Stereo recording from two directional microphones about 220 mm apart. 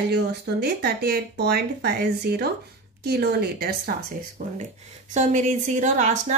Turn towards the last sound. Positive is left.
turn(degrees=-35)  # may be behind; listen again after turning